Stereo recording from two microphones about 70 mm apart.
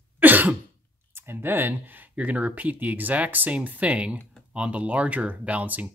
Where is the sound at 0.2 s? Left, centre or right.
Right.